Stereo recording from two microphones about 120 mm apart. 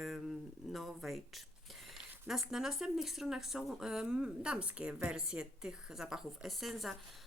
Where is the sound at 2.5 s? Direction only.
5° right (ahead or behind).